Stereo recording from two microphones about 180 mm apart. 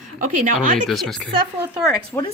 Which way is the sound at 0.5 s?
Centre (ahead or behind).